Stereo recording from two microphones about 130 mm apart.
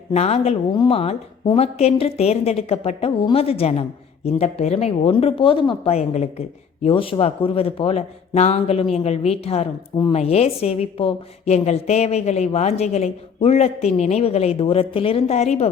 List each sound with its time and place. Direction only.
0.1 s a man's voice: 55° left (ahead or behind)
0.7 s speech: 35° left (ahead or behind)
0.9 s a man's voice: 50° left (ahead or behind)
6.8 s a man's voice: 45° left (ahead or behind)